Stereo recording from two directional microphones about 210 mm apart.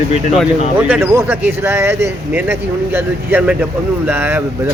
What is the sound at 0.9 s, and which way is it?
Speech, 10° right (ahead or behind).